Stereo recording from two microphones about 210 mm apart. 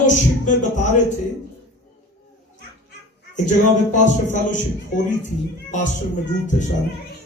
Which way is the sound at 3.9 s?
35° left (ahead or behind).